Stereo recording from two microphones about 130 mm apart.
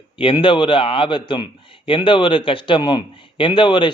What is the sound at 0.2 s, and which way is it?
A man's voice, 40° left (ahead or behind).